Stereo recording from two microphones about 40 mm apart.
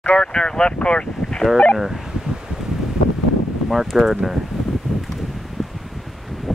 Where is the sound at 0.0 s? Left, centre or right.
Left.